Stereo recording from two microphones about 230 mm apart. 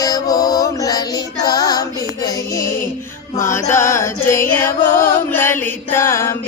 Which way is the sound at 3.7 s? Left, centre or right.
Centre.